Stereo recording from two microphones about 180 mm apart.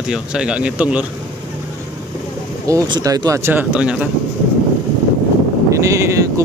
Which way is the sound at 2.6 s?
20° right (ahead or behind).